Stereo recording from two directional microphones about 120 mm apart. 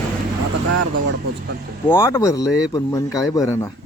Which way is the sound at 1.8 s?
20° left (ahead or behind).